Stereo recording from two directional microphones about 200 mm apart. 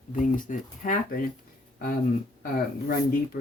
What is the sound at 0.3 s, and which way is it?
Speech, 40° left (ahead or behind).